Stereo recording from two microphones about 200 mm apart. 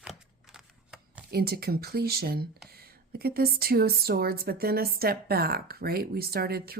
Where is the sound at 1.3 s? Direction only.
50° right (ahead or behind).